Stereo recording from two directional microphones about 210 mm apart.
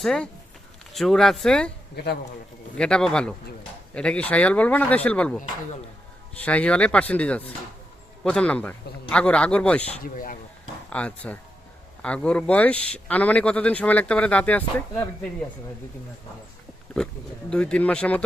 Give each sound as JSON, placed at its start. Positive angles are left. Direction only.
{"t": 0.0, "sound": "a man's voice", "side_deg": 0}
{"t": 2.7, "sound": "a man's voice", "side_deg": 5}
{"t": 6.4, "sound": "a man's voice", "side_deg": 5}
{"t": 10.0, "sound": "speech", "side_deg": 40}
{"t": 10.8, "sound": "speech", "side_deg": 5}
{"t": 17.5, "sound": "a man's voice", "side_deg": 5}